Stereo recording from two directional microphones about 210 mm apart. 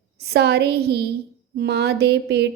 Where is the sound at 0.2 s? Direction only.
50° right (ahead or behind).